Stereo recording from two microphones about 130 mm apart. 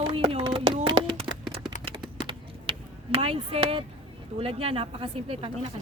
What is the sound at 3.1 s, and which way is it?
Speech, 50° right (ahead or behind).